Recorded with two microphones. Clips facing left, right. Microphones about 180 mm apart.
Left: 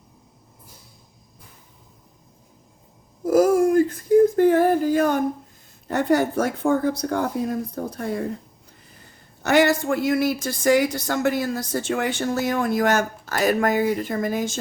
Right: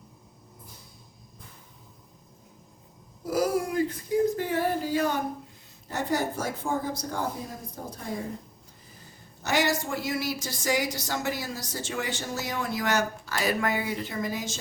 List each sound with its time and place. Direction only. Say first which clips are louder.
3.2 s a sound: left 10 dB; 45° left (ahead or behind)
5.9 s speech: left 8 dB; 60° left (ahead or behind)
9.4 s speech: left 8 dB; 55° left (ahead or behind)